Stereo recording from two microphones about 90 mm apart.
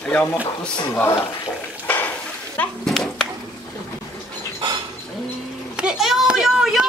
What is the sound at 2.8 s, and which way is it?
Speech, 5° left (ahead or behind).